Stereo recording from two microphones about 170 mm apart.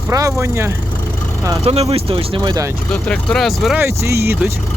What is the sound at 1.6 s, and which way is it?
Speech, 35° right (ahead or behind).